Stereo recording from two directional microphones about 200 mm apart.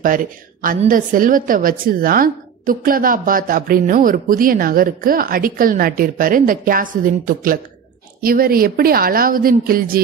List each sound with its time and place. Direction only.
0.0 s a woman's voice: 45° right (ahead or behind)